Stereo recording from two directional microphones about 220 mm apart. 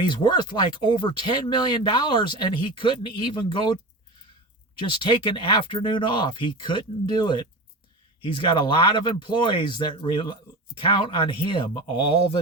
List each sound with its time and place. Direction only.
0.0 s speech: 20° left (ahead or behind)
4.8 s speech: 20° left (ahead or behind)